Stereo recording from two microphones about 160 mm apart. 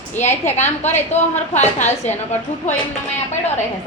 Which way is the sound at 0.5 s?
45° left (ahead or behind).